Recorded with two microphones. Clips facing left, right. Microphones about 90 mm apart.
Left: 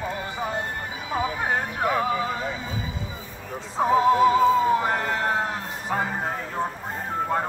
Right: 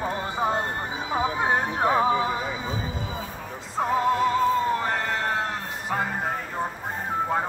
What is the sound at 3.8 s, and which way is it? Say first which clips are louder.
Music: left 4 dB; centre (ahead or behind).